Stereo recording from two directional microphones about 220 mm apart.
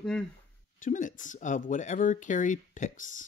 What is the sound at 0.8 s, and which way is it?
Speech, 35° left (ahead or behind).